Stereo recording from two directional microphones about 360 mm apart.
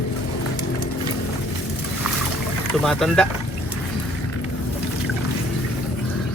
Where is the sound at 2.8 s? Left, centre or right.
Centre.